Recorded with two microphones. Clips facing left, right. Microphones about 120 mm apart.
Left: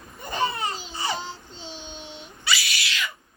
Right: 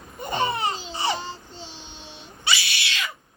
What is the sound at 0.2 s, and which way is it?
Laughter, 20° right (ahead or behind).